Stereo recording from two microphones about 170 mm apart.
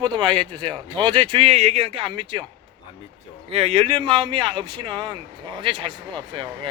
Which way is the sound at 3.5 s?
35° right (ahead or behind).